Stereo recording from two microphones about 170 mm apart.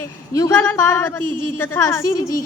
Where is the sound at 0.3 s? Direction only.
20° left (ahead or behind).